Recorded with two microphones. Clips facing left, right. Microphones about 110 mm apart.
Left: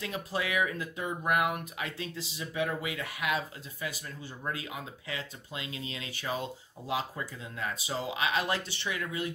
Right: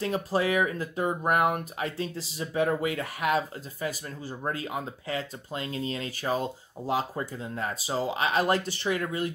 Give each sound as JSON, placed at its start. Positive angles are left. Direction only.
{"t": 0.0, "sound": "speech", "side_deg": -40}